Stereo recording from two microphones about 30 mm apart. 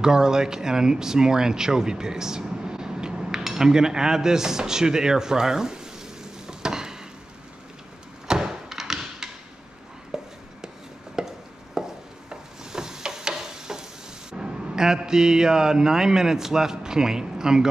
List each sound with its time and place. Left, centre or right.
0.0 s speech: right
3.3 s speech: centre
6.4 s a sound: centre
8.3 s thump: centre
10.1 s chopping: centre
11.7 s a sound: right
14.3 s speech: right